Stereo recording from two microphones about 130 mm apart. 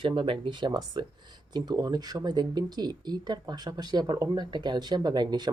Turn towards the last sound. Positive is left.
turn(degrees=-35)  # may be behind; listen again after turning